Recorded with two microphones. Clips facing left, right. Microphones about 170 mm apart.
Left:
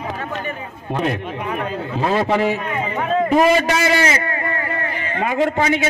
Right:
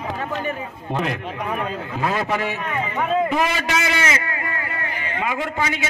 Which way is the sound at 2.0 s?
30° left (ahead or behind).